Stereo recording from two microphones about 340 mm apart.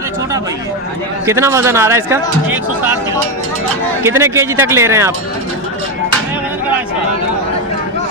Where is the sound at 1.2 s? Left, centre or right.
Centre.